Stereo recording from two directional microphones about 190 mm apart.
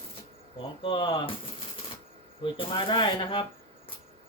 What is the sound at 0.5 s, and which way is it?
Speech, 25° left (ahead or behind).